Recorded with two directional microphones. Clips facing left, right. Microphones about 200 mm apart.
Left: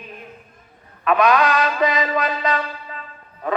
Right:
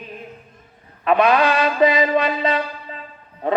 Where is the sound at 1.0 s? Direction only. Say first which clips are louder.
Right 1 dB; 30° right (ahead or behind).